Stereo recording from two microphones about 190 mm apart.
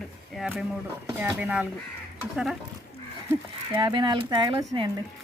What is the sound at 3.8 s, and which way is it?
Speech, 25° right (ahead or behind).